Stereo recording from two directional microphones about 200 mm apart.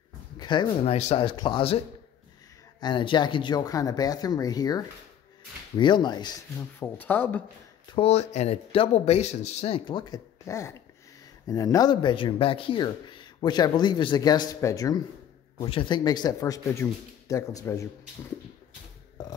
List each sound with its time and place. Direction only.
0.4 s speech: 20° left (ahead or behind)
2.8 s speech: 25° left (ahead or behind)
6.8 s a man's voice: 10° left (ahead or behind)
7.9 s a man's voice: 30° left (ahead or behind); by 17.8 s 15° left (ahead or behind)